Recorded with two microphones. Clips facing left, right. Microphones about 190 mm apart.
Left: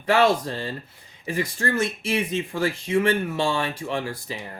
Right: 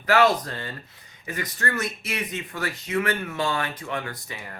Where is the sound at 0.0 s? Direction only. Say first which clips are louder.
Left 1 dB; 25° left (ahead or behind).